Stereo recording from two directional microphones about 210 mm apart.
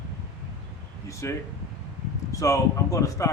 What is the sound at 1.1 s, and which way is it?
Speech, 15° left (ahead or behind).